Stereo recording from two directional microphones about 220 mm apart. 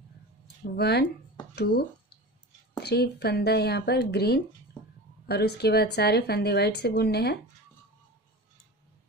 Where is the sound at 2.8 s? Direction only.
50° left (ahead or behind).